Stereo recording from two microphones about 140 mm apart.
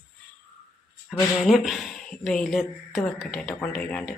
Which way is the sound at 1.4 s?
Centre (ahead or behind).